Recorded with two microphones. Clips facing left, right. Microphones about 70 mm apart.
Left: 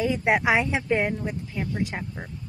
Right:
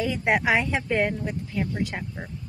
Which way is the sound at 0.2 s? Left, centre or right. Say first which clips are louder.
Right 1 dB; centre.